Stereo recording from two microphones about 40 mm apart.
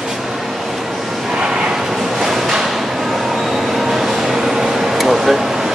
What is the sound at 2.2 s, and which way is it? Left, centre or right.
Train, centre.